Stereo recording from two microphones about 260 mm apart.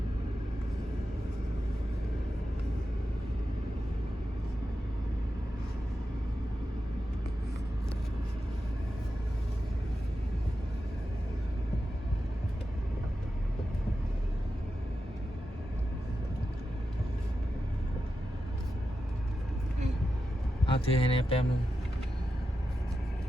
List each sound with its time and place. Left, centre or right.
20.7 s speech: left